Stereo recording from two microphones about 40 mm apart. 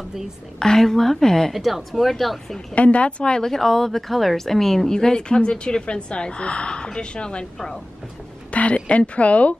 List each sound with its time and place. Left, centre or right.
0.6 s a woman's voice: centre
1.5 s speech: centre
2.7 s speech: left
3.3 s a woman's voice: centre; by 9.6 s left